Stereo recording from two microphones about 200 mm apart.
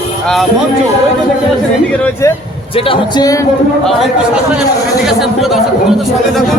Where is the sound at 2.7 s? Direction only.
25° left (ahead or behind).